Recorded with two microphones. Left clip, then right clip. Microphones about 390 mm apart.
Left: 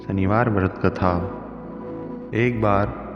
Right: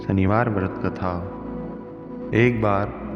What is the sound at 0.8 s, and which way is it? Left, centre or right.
Speech, left.